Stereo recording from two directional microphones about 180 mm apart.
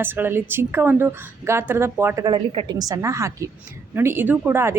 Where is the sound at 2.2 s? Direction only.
30° right (ahead or behind).